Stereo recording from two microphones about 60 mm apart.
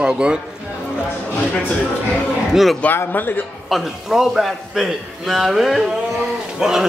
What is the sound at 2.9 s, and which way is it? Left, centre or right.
Speech, left.